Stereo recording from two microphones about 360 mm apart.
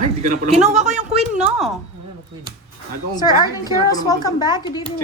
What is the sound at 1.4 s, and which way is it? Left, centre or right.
Speech, centre.